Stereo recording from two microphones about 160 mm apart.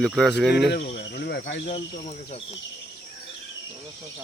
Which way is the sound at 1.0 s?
90° left.